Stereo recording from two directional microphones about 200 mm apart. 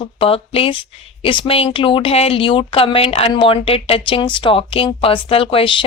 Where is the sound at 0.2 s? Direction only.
30° left (ahead or behind).